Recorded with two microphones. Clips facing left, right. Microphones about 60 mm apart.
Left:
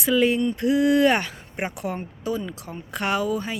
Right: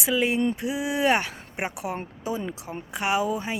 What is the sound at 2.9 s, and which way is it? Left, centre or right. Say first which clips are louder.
Speech: even; centre.